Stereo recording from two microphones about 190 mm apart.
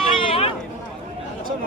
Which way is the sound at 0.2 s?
30° left (ahead or behind).